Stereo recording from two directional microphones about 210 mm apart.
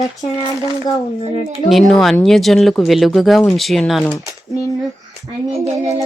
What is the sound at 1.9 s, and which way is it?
Speech, centre (ahead or behind).